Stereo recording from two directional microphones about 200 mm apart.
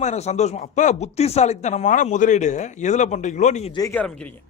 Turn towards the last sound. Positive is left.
turn(degrees=5)  # may be behind; listen again after turning